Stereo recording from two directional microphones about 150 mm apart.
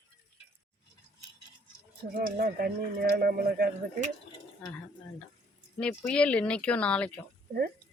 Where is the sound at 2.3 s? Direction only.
85° right.